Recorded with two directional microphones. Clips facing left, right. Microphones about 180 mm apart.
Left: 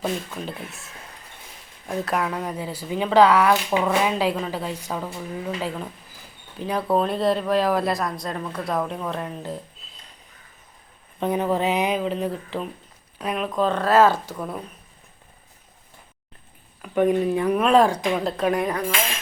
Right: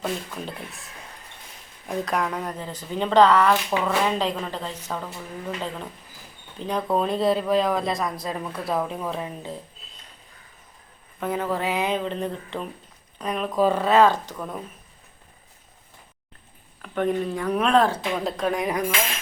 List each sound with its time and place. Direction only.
0.3 s speech: centre (ahead or behind)
1.9 s speech: 5° left (ahead or behind)
11.2 s speech: 20° left (ahead or behind)
11.9 s speech: 5° left (ahead or behind)
16.8 s speech: 10° left (ahead or behind)
18.6 s speech: 10° right (ahead or behind)